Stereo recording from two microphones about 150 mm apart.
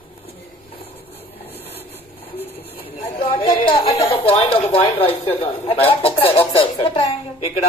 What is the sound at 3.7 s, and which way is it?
A woman's voice, 40° left (ahead or behind).